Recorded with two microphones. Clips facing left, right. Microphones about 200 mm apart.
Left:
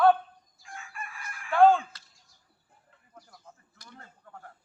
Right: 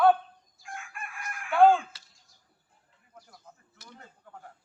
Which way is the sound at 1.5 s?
5° right (ahead or behind).